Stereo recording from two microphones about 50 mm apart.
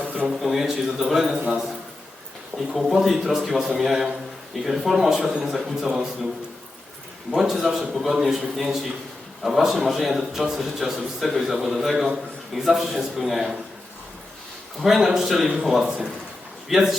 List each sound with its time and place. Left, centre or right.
0.0 s a sound: right
0.3 s a man's voice: centre
2.8 s a man's voice: centre
7.3 s a man's voice: centre
14.8 s a man's voice: centre